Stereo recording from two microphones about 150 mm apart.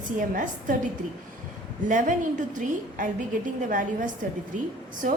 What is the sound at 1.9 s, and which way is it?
A woman's voice, 60° right (ahead or behind).